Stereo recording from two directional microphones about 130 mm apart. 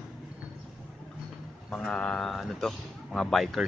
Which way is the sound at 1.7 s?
5° left (ahead or behind).